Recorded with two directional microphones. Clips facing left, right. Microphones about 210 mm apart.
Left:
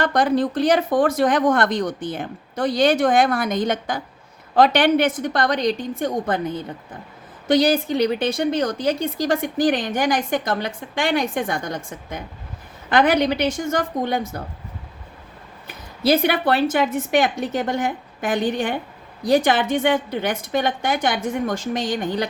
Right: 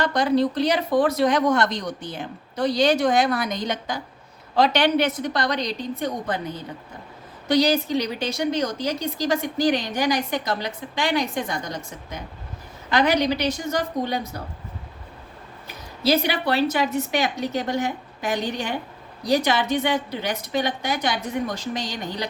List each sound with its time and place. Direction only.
0.0 s speech: 50° left (ahead or behind)
15.6 s speech: 55° left (ahead or behind)